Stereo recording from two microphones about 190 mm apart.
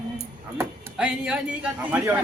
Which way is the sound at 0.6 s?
10° right (ahead or behind).